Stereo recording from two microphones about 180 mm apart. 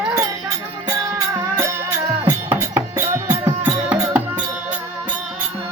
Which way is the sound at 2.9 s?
15° right (ahead or behind).